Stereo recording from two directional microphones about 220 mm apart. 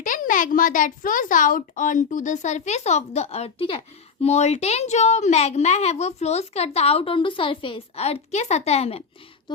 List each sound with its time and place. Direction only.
0.0 s a child's voice: 35° left (ahead or behind)